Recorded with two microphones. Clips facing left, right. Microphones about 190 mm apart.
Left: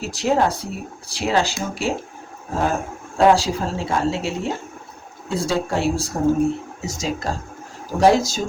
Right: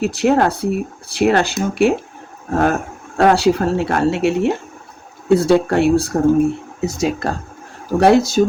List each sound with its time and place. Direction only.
0.0 s speech: 60° right (ahead or behind)